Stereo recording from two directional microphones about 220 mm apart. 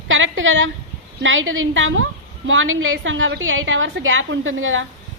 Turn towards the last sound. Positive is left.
turn(degrees=-65)  # may be behind; listen again after turning